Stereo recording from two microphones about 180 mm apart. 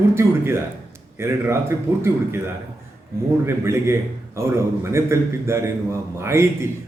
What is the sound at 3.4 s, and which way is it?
A man's voice, 15° right (ahead or behind).